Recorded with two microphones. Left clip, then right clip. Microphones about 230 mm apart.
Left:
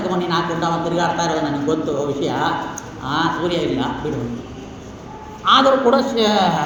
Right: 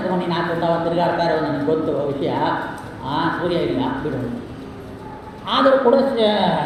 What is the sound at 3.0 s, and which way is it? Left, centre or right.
Speech, left.